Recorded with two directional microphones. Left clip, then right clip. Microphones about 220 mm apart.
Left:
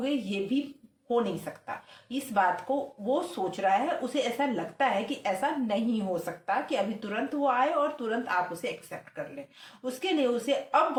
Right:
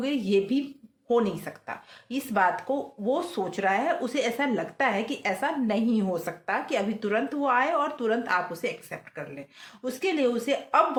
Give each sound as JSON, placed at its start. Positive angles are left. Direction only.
{"t": 0.0, "sound": "speech", "side_deg": -50}
{"t": 9.8, "sound": "speech", "side_deg": -50}